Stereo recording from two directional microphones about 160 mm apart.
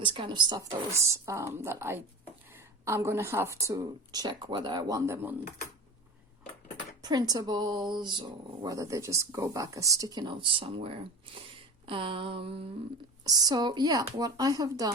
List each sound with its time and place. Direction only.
0.0 s a woman's voice: 30° right (ahead or behind)
7.0 s speech: 25° right (ahead or behind)
11.9 s a sound: 35° right (ahead or behind)
13.2 s speech: 25° right (ahead or behind)